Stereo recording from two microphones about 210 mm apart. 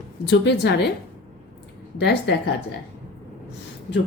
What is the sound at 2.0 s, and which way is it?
Speech, 55° left (ahead or behind).